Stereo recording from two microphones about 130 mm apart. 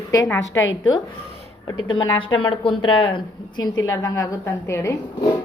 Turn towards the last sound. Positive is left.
turn(degrees=25)  # may be behind; listen again after turning